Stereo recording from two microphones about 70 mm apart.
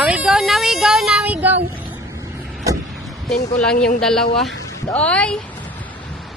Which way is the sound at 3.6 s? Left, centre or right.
Centre.